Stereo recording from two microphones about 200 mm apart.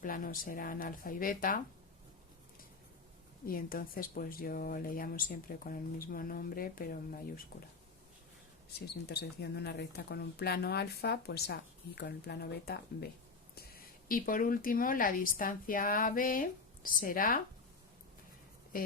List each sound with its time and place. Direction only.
0.0 s speech: 45° left (ahead or behind)
3.4 s speech: 45° left (ahead or behind)
8.9 s speech: 55° left (ahead or behind)